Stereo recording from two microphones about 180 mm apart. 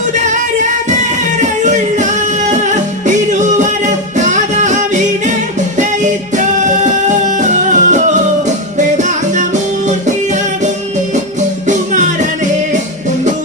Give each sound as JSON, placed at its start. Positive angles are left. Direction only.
{"t": 1.4, "sound": "music", "side_deg": -40}
{"t": 4.2, "sound": "music", "side_deg": -45}
{"t": 6.3, "sound": "music", "side_deg": -45}
{"t": 11.7, "sound": "music", "side_deg": -45}